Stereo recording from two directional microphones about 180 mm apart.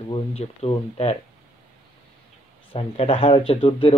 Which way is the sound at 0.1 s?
35° left (ahead or behind).